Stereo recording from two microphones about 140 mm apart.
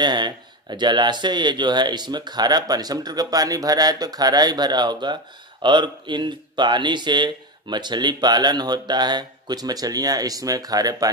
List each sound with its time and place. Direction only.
0.0 s speech: 30° right (ahead or behind)